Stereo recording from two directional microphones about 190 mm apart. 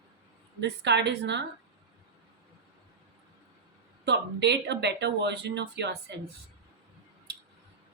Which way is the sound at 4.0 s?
65° right (ahead or behind).